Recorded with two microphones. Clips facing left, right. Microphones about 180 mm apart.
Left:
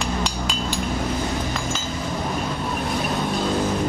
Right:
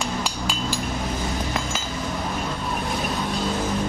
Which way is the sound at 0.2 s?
5° right (ahead or behind).